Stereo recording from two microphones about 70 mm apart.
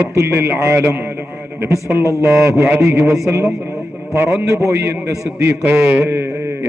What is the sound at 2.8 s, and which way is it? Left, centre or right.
A man's voice, right.